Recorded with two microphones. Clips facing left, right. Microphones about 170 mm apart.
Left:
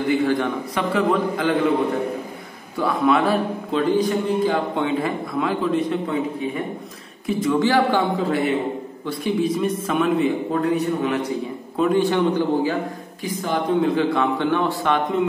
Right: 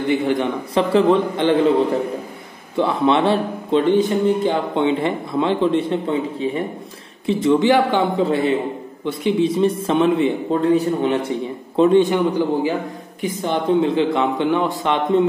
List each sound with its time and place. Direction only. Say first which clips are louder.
0.1 s a man's voice: right 1 dB; 25° right (ahead or behind)
2.8 s a man's voice: right 2 dB; 25° right (ahead or behind)
13.2 s a man's voice: right 2 dB; 25° right (ahead or behind)